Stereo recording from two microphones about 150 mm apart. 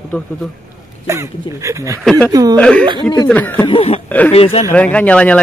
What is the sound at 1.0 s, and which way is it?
Speech, 20° right (ahead or behind).